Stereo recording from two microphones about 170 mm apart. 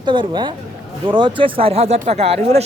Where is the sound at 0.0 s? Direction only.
25° right (ahead or behind).